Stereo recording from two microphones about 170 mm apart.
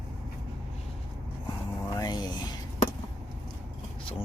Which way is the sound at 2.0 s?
25° left (ahead or behind).